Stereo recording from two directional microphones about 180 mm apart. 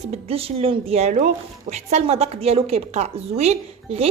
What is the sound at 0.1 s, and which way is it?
A woman's voice, 30° right (ahead or behind).